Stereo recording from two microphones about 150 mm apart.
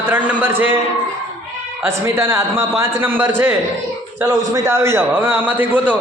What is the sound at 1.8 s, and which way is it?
A man's voice, 15° right (ahead or behind).